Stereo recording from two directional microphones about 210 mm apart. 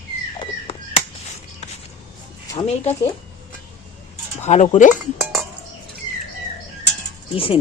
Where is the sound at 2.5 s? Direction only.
30° left (ahead or behind).